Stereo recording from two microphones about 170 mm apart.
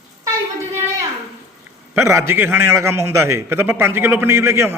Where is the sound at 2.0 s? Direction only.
15° right (ahead or behind).